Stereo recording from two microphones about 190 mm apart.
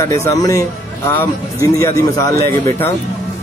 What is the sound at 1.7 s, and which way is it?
Speech, 15° left (ahead or behind).